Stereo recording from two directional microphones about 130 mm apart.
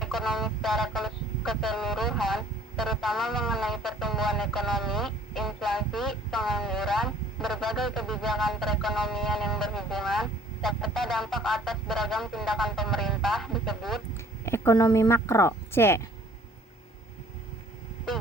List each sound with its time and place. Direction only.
0.0 s speech: centre (ahead or behind)
14.1 s speech: 20° left (ahead or behind)